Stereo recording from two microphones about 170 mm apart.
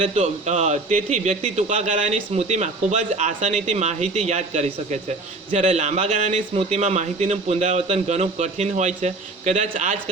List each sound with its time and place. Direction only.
0.0 s a man's voice: 40° right (ahead or behind)